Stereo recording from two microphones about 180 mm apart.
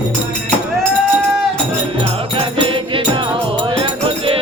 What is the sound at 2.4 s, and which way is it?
Music, 30° right (ahead or behind).